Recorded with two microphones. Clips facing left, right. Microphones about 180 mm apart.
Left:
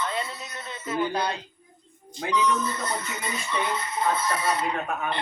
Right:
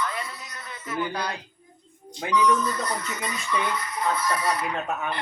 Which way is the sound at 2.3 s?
25° left (ahead or behind).